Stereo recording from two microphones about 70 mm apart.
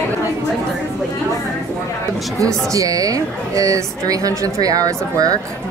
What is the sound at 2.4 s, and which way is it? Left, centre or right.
Speech, right.